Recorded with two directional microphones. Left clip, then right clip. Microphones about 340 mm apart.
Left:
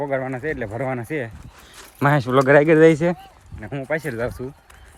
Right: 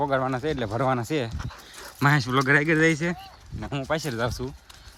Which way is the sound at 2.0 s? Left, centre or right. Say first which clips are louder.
Left 5 dB; centre.